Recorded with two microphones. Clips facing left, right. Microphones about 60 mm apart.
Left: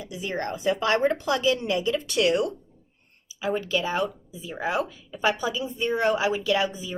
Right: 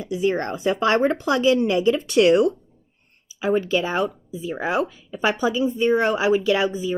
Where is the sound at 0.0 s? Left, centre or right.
Right.